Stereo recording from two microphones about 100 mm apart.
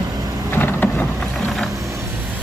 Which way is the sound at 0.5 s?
20° left (ahead or behind).